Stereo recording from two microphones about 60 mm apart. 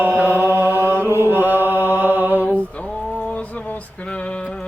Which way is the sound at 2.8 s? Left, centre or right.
Centre.